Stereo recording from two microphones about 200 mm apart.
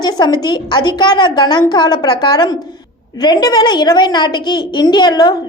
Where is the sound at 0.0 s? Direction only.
20° left (ahead or behind).